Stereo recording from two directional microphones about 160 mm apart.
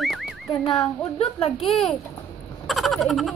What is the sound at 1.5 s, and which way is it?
Speech, centre (ahead or behind).